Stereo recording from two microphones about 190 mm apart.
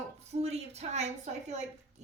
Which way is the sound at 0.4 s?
35° right (ahead or behind).